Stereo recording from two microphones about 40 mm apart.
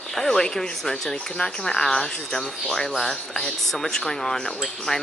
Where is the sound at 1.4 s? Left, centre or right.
Centre.